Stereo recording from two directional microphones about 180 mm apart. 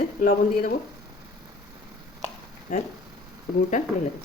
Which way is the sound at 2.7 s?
50° left (ahead or behind).